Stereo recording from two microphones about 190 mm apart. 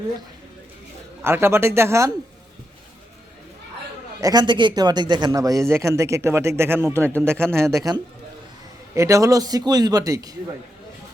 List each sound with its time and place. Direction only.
1.2 s a man's voice: 15° right (ahead or behind)
4.2 s a man's voice: 20° right (ahead or behind)